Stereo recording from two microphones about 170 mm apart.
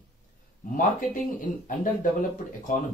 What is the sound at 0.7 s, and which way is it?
Speech, 50° left (ahead or behind).